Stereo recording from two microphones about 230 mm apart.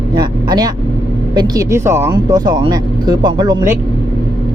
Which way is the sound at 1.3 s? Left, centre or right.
Centre.